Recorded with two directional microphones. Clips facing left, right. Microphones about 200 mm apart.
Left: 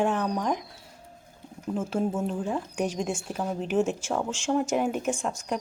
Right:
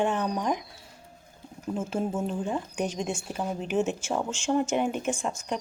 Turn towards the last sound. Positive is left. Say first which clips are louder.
# left 1 dB
turn(degrees=0)  # may be behind; listen again after turning